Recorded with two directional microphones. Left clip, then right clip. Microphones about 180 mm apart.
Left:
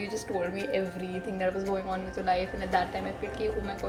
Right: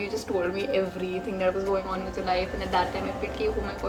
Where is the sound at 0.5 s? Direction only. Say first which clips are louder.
Right 3 dB; 15° left (ahead or behind).